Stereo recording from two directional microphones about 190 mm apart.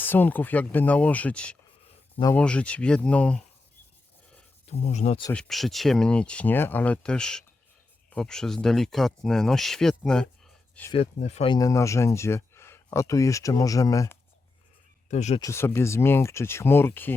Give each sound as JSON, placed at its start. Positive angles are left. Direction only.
{"t": 0.0, "sound": "speech", "side_deg": 10}
{"t": 4.6, "sound": "speech", "side_deg": 35}
{"t": 5.3, "sound": "speech", "side_deg": 0}
{"t": 10.9, "sound": "speech", "side_deg": 35}
{"t": 11.5, "sound": "speech", "side_deg": 15}
{"t": 15.1, "sound": "speech", "side_deg": 35}
{"t": 15.4, "sound": "speech", "side_deg": 15}